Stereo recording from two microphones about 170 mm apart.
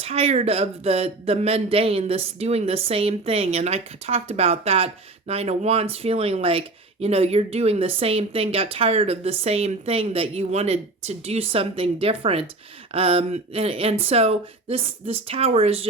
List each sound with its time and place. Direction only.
0.0 s speech: 35° right (ahead or behind)